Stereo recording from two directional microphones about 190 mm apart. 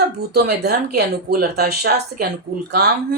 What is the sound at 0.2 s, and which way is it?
Speech, 55° right (ahead or behind).